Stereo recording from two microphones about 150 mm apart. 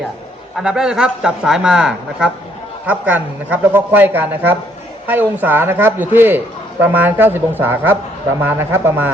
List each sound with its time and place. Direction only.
0.5 s speech: 5° right (ahead or behind)